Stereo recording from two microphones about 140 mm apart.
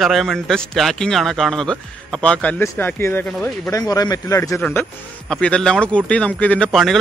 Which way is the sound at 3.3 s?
5° left (ahead or behind).